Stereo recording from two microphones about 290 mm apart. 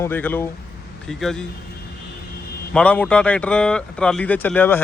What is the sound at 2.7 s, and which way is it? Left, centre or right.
Speech, centre.